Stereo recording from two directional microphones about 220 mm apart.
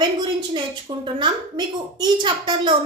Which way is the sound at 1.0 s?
20° right (ahead or behind).